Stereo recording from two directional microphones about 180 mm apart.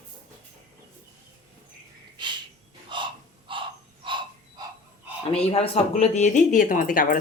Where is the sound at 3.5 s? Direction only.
30° right (ahead or behind).